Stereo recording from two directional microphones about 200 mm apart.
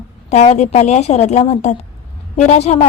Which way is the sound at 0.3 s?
35° left (ahead or behind).